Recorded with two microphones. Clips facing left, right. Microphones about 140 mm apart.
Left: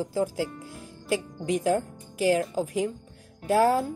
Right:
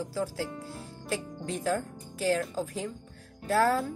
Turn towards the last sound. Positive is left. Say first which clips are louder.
# left 4 dB
turn(degrees=15)  # may be behind; listen again after turning